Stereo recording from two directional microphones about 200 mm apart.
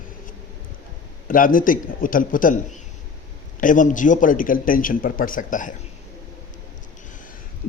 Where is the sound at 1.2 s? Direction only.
45° left (ahead or behind).